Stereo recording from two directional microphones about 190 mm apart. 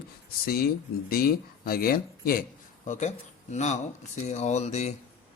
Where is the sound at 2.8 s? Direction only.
40° left (ahead or behind).